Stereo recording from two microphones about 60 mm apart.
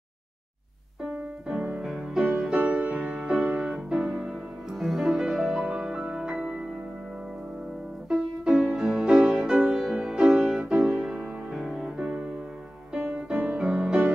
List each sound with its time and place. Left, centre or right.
1.0 s music: centre
2.5 s music: right; by 6.7 s centre
8.1 s music: centre
13.3 s music: centre